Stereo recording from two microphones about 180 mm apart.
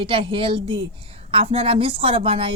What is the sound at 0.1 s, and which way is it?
A woman's voice, 30° right (ahead or behind).